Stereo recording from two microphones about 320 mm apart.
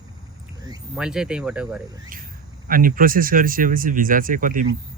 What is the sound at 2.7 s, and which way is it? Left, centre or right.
Speech, right.